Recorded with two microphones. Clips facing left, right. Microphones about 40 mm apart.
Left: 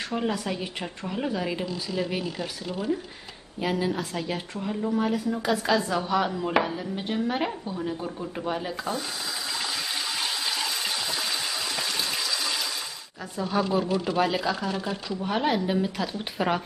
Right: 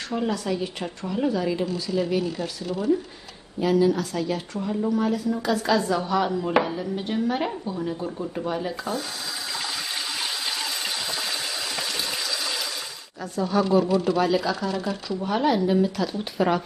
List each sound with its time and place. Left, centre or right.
0.1 s speech: centre
2.6 s speech: left
3.6 s speech: left; by 9.0 s centre
10.1 s water: centre
13.2 s speech: centre
14.7 s speech: left
15.2 s speech: centre